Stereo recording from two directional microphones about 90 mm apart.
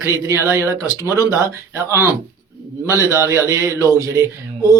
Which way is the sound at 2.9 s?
30° right (ahead or behind).